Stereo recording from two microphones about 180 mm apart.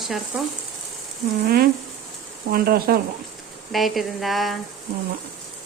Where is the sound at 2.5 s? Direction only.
55° right (ahead or behind).